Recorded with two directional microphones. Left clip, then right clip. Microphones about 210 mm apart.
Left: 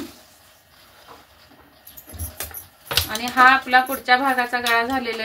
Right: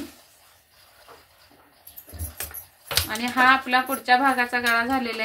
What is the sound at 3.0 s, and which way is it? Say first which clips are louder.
Speech: left 4 dB; 25° right (ahead or behind).